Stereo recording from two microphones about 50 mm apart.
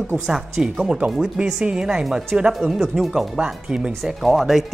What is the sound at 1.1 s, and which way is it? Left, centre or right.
Speech, centre.